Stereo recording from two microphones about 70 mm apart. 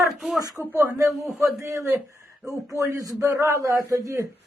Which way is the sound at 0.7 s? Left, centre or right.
Right.